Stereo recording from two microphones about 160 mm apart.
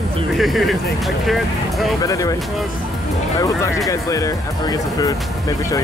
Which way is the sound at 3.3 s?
20° left (ahead or behind).